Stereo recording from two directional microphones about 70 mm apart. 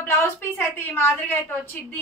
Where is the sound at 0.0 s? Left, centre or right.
Left.